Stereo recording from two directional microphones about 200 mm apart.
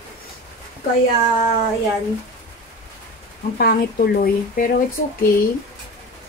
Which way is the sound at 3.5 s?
50° left (ahead or behind).